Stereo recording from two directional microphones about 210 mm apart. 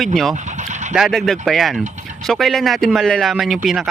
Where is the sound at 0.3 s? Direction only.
35° right (ahead or behind).